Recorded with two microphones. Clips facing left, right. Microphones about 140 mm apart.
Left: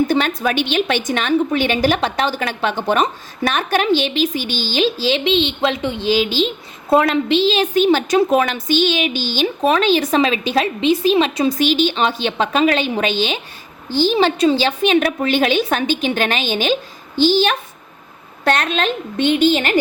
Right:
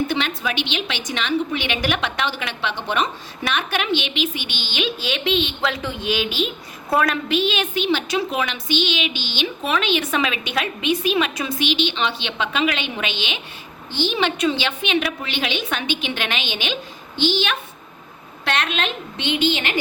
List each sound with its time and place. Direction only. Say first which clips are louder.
0.1 s a woman's voice: left 6 dB; 45° left (ahead or behind)